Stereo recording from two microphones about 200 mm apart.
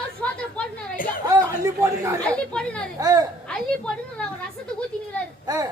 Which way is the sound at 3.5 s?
5° left (ahead or behind).